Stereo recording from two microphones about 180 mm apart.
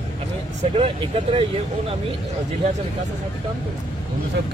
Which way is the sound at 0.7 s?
30° right (ahead or behind).